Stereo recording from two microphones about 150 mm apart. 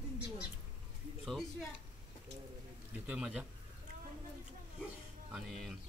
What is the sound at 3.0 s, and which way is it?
Speech, 10° right (ahead or behind).